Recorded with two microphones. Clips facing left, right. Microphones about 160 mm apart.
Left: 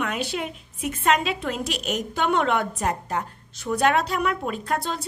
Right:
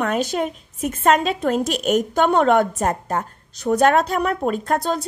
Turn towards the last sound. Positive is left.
turn(degrees=-45)  # may be behind; listen again after turning